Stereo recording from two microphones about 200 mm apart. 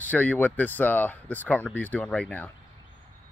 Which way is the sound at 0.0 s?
10° left (ahead or behind).